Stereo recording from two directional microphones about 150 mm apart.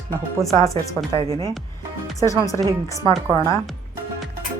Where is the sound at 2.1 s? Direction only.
20° left (ahead or behind).